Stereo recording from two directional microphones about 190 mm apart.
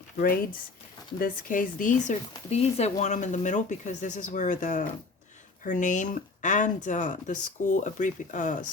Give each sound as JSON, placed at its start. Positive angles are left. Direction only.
{"t": 1.2, "sound": "speech", "side_deg": 45}